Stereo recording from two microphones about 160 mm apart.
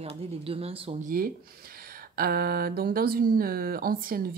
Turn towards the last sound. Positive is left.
turn(degrees=-65)  # may be behind; listen again after turning